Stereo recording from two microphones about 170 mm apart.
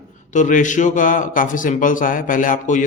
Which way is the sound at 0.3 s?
50° left (ahead or behind).